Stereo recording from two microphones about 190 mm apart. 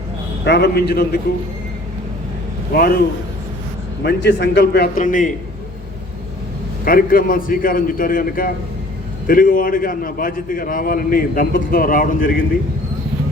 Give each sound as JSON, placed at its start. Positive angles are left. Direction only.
{"t": 0.4, "sound": "a man's voice", "side_deg": 60}
{"t": 2.7, "sound": "a man's voice", "side_deg": 50}
{"t": 4.0, "sound": "a man's voice", "side_deg": 65}
{"t": 6.8, "sound": "a man's voice", "side_deg": 50}